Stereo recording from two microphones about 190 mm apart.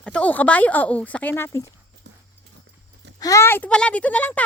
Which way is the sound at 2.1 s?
65° right (ahead or behind).